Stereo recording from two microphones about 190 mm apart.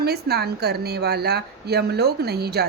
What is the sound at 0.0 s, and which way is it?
Speech, 55° right (ahead or behind).